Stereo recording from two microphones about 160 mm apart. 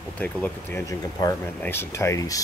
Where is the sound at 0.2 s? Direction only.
10° left (ahead or behind).